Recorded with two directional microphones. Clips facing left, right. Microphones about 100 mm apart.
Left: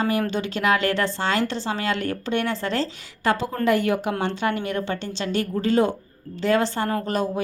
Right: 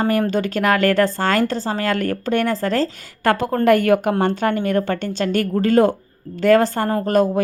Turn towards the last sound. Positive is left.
turn(degrees=-45)  # may be behind; listen again after turning